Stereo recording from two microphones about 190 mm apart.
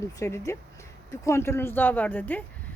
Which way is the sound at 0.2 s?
15° left (ahead or behind).